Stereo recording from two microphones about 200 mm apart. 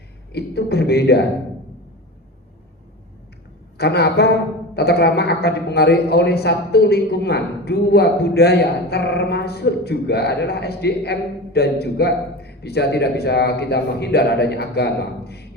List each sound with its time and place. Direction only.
0.3 s a man's voice: 55° left (ahead or behind)
3.8 s a man's voice: 55° left (ahead or behind)